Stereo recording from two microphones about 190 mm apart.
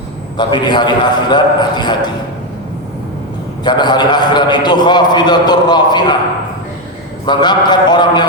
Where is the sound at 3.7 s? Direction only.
20° left (ahead or behind).